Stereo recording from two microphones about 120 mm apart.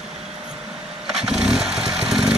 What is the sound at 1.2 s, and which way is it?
Motorcycle, 5° right (ahead or behind).